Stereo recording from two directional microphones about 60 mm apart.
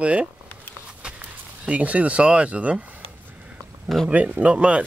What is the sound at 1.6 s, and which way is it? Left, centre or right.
Speech, right.